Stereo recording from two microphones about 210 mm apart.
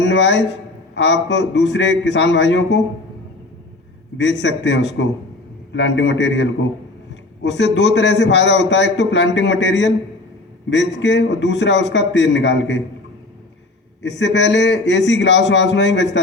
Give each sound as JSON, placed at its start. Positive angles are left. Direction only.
{"t": 0.0, "sound": "a man's voice", "side_deg": 55}
{"t": 4.2, "sound": "a man's voice", "side_deg": 60}
{"t": 14.0, "sound": "a man's voice", "side_deg": 55}